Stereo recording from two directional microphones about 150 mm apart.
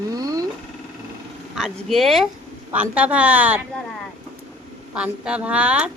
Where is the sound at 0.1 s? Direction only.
25° right (ahead or behind).